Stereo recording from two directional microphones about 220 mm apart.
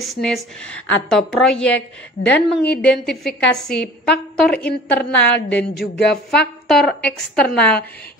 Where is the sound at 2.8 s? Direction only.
5° left (ahead or behind).